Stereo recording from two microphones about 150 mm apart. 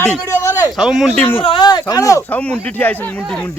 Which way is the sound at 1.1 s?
10° left (ahead or behind).